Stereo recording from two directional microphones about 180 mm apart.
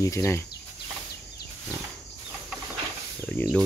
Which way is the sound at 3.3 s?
10° left (ahead or behind).